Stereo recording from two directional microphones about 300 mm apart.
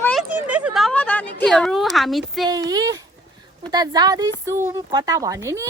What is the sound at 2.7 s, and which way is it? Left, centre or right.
A woman's voice, centre.